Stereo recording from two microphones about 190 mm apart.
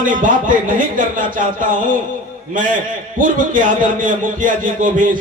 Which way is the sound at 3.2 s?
45° right (ahead or behind).